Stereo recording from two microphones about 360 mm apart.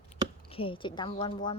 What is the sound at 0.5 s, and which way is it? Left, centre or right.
Speech, centre.